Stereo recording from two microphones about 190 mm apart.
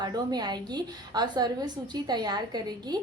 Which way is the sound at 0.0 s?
20° right (ahead or behind).